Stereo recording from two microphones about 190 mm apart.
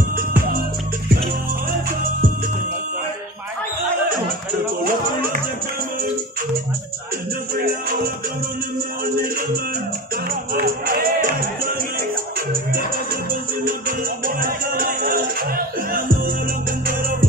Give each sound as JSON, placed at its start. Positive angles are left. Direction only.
{"t": 7.5, "sound": "music", "side_deg": -50}
{"t": 10.5, "sound": "music", "side_deg": -50}
{"t": 13.8, "sound": "music", "side_deg": -45}